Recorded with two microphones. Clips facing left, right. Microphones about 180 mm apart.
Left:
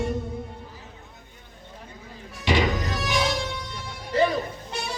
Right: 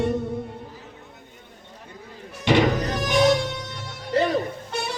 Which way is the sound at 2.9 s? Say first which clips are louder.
Right 7 dB; 40° right (ahead or behind).